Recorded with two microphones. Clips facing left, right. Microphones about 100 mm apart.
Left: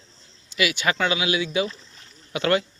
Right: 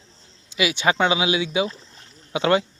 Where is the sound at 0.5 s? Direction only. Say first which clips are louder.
Right 3 dB; 25° right (ahead or behind).